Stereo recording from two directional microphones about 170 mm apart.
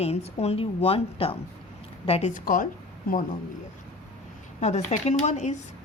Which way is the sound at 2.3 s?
50° left (ahead or behind).